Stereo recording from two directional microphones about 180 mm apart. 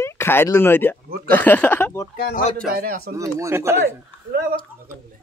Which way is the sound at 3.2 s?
15° right (ahead or behind).